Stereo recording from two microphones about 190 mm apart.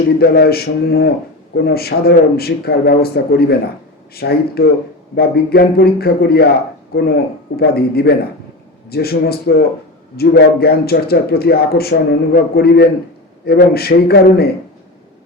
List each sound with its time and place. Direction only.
0.2 s speech: 55° left (ahead or behind)
7.5 s speech: 55° left (ahead or behind)